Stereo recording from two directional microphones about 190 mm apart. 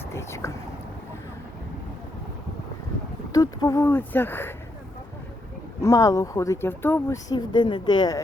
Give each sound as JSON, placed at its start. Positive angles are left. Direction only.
{"t": 0.1, "sound": "speech", "side_deg": 15}
{"t": 3.3, "sound": "speech", "side_deg": 20}
{"t": 5.8, "sound": "speech", "side_deg": 15}